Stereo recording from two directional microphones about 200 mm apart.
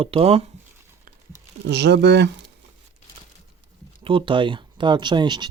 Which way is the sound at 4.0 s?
25° right (ahead or behind).